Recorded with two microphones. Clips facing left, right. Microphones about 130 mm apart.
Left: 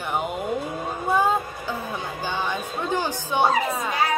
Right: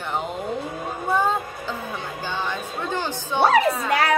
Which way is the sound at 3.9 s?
80° right.